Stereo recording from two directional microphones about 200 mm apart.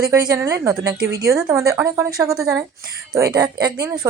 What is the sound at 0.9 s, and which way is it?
Speech, 50° right (ahead or behind).